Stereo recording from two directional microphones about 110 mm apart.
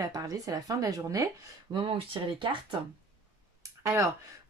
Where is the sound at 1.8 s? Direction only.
55° right (ahead or behind).